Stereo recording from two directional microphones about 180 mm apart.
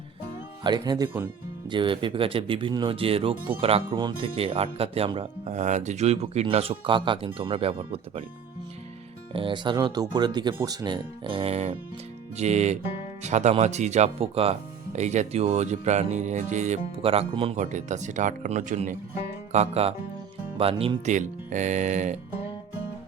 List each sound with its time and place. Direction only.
0.6 s speech: 25° right (ahead or behind)
1.7 s speech: 25° right (ahead or behind)
9.3 s speech: 30° right (ahead or behind)
17.6 s speech: 45° right (ahead or behind)
19.5 s music: 35° right (ahead or behind)
20.6 s speech: 30° right (ahead or behind)